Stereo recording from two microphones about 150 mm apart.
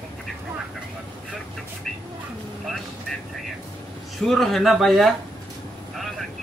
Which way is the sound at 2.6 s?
Centre (ahead or behind).